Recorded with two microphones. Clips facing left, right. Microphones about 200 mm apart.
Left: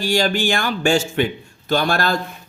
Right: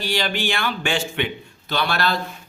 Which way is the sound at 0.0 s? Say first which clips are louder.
Left 5 dB; 45° left (ahead or behind).